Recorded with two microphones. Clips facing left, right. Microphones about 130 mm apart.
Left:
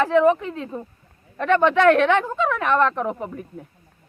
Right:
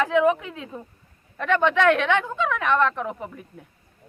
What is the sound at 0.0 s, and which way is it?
Speech, centre (ahead or behind).